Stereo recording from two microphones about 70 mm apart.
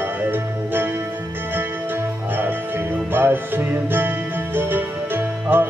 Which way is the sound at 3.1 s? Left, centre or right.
Right.